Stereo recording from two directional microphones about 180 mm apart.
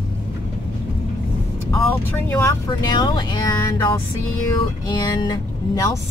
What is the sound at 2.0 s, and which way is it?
Speech, 10° left (ahead or behind).